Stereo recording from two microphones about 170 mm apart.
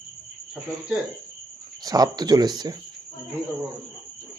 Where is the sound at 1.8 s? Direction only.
20° right (ahead or behind).